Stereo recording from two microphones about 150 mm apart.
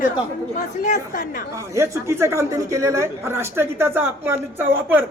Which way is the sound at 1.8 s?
20° right (ahead or behind).